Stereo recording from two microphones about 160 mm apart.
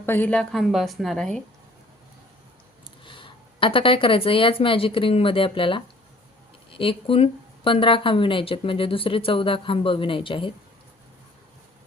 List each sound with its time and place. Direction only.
0.0 s a woman's voice: 10° left (ahead or behind)
3.0 s a woman's voice: 30° left (ahead or behind)